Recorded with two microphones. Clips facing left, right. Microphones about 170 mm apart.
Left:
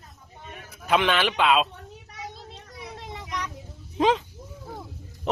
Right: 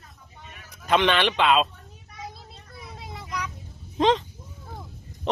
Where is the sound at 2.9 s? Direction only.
Centre (ahead or behind).